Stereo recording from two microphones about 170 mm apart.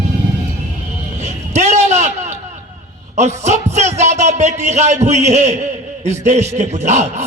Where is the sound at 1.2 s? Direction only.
40° right (ahead or behind).